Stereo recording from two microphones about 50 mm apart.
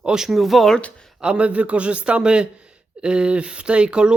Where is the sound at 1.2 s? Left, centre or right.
Right.